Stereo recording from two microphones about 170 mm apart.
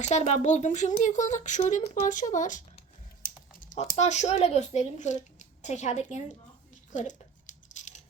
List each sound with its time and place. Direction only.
0.0 s speech: 40° left (ahead or behind)
3.2 s typing: 60° left (ahead or behind)
3.6 s speech: 50° left (ahead or behind)
6.9 s a sound: 45° left (ahead or behind)